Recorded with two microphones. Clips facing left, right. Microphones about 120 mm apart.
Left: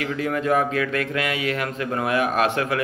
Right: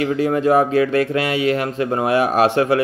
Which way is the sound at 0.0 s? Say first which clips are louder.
Right 7 dB; 30° right (ahead or behind).